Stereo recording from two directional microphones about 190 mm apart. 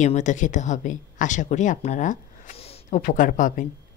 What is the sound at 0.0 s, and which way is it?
Speech, 40° left (ahead or behind).